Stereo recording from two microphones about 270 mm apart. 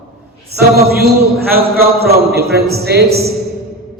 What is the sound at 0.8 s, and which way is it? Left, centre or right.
Speech, right.